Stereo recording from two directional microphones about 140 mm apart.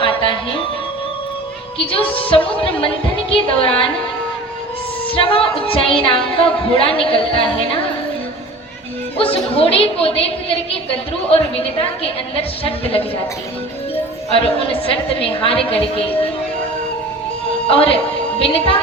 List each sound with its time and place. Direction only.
0.0 s music: 40° left (ahead or behind)
1.9 s a woman's voice: 40° left (ahead or behind)
5.0 s a woman's voice: 40° left (ahead or behind)
9.1 s a woman's voice: 40° left (ahead or behind)
14.3 s a woman's voice: 40° left (ahead or behind)
17.7 s speech: 40° left (ahead or behind)